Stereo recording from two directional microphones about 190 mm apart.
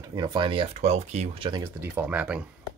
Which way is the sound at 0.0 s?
20° right (ahead or behind).